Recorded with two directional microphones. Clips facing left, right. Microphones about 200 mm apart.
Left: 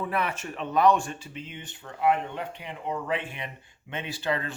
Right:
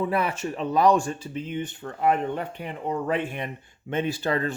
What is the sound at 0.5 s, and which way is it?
Speech, 35° right (ahead or behind).